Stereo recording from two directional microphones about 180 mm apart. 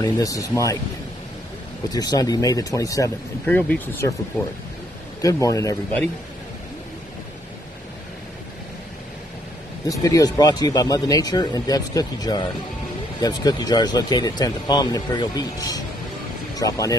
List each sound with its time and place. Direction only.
0.0 s speech: 20° left (ahead or behind)
1.9 s speech: 20° left (ahead or behind)
5.2 s speech: 20° left (ahead or behind)
9.8 s speech: 20° left (ahead or behind)